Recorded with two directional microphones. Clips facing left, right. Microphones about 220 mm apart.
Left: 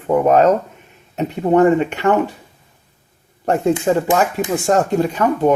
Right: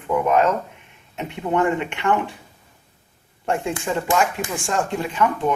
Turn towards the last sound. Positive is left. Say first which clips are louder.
# left 6 dB
turn(degrees=40)  # may be behind; listen again after turning